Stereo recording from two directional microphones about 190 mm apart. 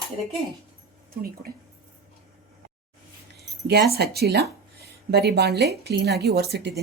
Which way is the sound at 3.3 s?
60° right (ahead or behind).